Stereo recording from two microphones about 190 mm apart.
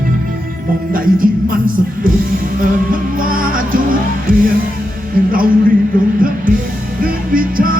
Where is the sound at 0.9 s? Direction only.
50° right (ahead or behind).